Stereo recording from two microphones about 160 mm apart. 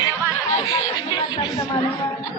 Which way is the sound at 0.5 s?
25° left (ahead or behind).